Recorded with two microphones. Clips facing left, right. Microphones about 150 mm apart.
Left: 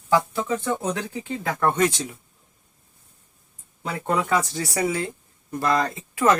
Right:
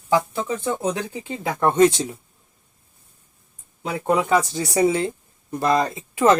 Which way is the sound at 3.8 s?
15° right (ahead or behind).